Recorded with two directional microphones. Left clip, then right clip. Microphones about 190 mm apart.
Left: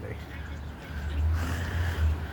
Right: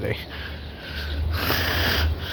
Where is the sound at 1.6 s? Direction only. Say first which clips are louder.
Right 14 dB; 60° right (ahead or behind).